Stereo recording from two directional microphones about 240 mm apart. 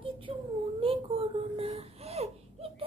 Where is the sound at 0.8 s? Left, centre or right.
Right.